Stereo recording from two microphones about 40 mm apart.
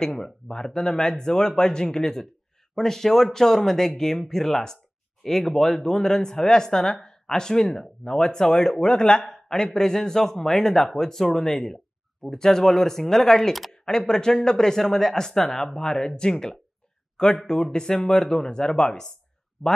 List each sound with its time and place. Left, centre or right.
0.0 s speech: centre
19.6 s speech: centre